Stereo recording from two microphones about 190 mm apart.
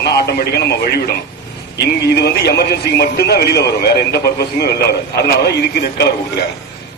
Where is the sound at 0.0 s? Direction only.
60° left (ahead or behind).